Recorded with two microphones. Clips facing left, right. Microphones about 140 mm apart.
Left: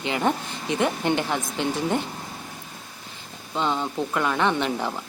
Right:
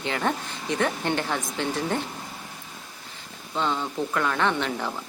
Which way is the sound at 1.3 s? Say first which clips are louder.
Left 2 dB; 5° left (ahead or behind).